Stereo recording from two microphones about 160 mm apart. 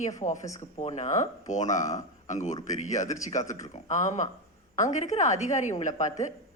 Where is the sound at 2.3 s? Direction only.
50° left (ahead or behind).